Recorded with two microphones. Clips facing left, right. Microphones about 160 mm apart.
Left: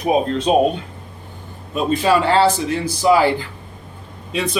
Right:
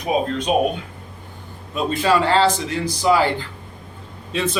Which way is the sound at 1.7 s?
15° left (ahead or behind).